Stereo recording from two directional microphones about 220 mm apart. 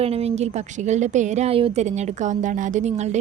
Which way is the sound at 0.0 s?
30° right (ahead or behind).